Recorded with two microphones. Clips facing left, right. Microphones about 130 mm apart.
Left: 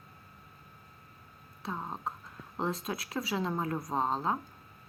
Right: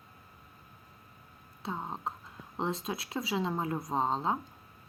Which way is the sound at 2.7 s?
25° right (ahead or behind).